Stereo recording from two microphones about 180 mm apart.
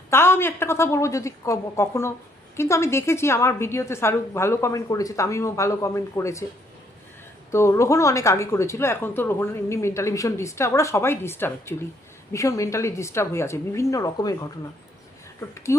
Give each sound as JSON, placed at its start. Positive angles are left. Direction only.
{"t": 0.1, "sound": "a woman's voice", "side_deg": 15}
{"t": 7.5, "sound": "a woman's voice", "side_deg": 15}
{"t": 15.4, "sound": "a woman's voice", "side_deg": 15}